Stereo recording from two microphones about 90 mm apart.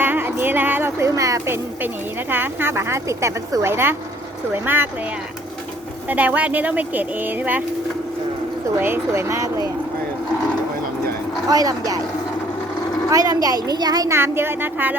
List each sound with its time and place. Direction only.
0.0 s music: 25° right (ahead or behind)
2.3 s a woman's voice: 25° right (ahead or behind)
6.1 s a woman's voice: 15° right (ahead or behind)
8.7 s speech: 25° right (ahead or behind)
11.4 s speech: 40° right (ahead or behind)
13.1 s speech: 40° right (ahead or behind)
14.1 s a woman's voice: 25° right (ahead or behind)